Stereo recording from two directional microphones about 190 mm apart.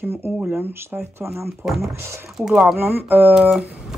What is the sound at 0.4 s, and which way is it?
Speech, 10° right (ahead or behind).